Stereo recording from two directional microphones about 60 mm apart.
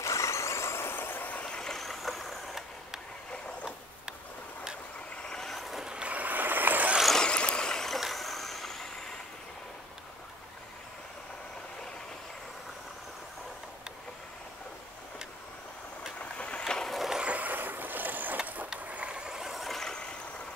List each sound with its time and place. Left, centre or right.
0.0 s vehicle: left
1.4 s vehicle: centre
5.1 s vehicle: centre
5.9 s vehicle: right
7.2 s stream: centre
8.0 s vehicle: centre
16.2 s a sound: centre
17.2 s vehicle: right; by 20.0 s centre